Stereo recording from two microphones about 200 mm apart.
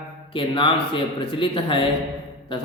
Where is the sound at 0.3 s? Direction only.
25° left (ahead or behind).